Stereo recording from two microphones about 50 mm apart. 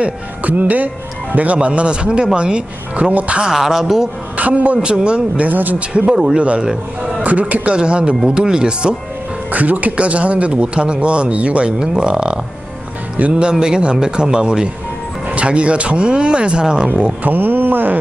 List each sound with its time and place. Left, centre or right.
0.0 s speech: right
3.4 s speech: centre
4.4 s speech: right
5.5 s speech: right
5.9 s speech: centre
6.4 s speech: right
7.7 s speech: centre
9.5 s speech: right; by 17.1 s centre
17.2 s speech: right